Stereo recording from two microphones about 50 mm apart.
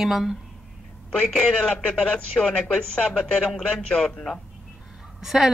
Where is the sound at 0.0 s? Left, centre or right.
Centre.